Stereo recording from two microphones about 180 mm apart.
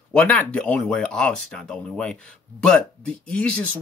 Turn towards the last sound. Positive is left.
turn(degrees=5)  # may be behind; listen again after turning